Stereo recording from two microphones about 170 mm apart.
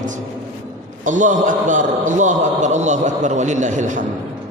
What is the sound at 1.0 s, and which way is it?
A man's voice, 50° right (ahead or behind).